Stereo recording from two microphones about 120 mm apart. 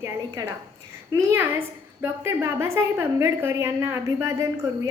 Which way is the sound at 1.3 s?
20° right (ahead or behind).